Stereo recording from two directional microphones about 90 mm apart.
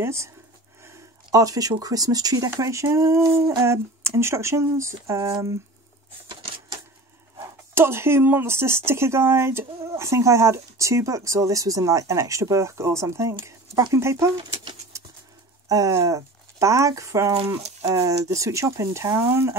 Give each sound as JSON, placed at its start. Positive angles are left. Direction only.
{"t": 0.0, "sound": "speech", "side_deg": -30}
{"t": 6.2, "sound": "typewriter", "side_deg": -60}
{"t": 7.3, "sound": "speech", "side_deg": -25}
{"t": 14.9, "sound": "pigeon", "side_deg": -35}
{"t": 15.7, "sound": "speech", "side_deg": -35}